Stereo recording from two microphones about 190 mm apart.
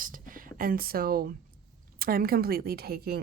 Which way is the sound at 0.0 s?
45° right (ahead or behind).